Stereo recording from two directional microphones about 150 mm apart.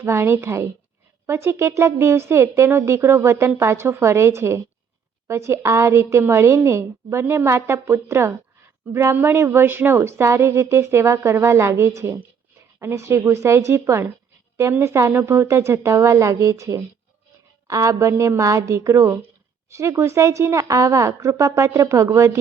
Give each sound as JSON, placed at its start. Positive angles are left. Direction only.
{"t": 0.0, "sound": "a woman's voice", "side_deg": -15}